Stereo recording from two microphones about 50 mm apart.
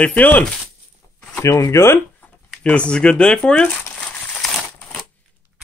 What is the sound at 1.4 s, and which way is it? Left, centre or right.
Speech, left.